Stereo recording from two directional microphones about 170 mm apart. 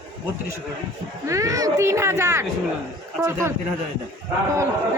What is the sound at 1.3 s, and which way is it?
Speech, 20° right (ahead or behind).